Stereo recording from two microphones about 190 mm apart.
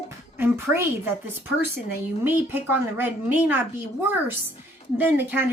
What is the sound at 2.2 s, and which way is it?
Speech, 10° right (ahead or behind).